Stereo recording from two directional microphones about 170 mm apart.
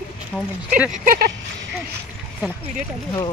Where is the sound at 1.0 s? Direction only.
60° right (ahead or behind).